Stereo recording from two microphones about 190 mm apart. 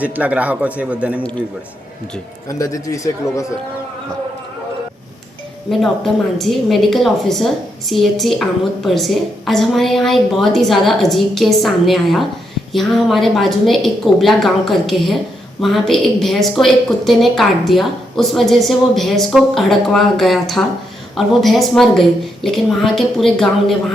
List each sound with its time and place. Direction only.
0.0 s a man's voice: 10° right (ahead or behind)
2.6 s speech: 15° left (ahead or behind)
5.7 s a woman's voice: centre (ahead or behind)